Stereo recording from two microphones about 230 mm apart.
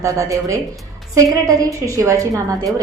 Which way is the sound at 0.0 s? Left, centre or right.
Centre.